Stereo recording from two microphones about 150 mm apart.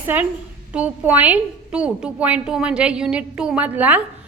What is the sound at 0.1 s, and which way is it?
A woman's voice, 15° right (ahead or behind).